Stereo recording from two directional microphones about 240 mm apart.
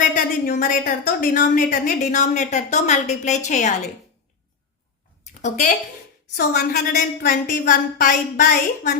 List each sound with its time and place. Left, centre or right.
0.0 s a woman's voice: left
5.4 s a woman's voice: left